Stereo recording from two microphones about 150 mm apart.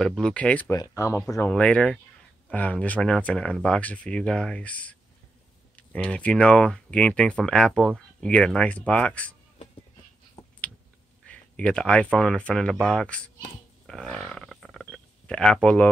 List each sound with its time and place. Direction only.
0.0 s speech: 5° left (ahead or behind)
0.7 s speech: 20° left (ahead or behind)
1.5 s speech: 5° left (ahead or behind)
10.4 s a sound: 20° left (ahead or behind)
11.2 s speech: 10° left (ahead or behind)
13.8 s stomach rumble: 5° left (ahead or behind)